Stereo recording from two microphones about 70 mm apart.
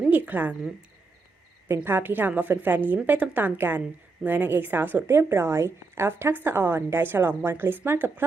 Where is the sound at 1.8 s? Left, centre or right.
Right.